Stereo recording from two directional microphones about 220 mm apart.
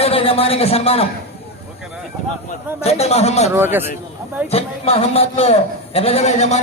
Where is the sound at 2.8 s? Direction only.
30° left (ahead or behind).